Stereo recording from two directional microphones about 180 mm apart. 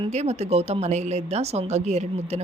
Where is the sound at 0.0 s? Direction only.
35° right (ahead or behind).